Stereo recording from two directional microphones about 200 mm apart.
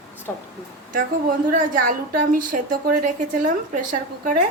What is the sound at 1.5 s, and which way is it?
A woman's voice, 40° right (ahead or behind).